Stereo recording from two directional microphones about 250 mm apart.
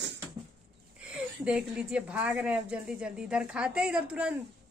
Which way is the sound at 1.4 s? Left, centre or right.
Centre.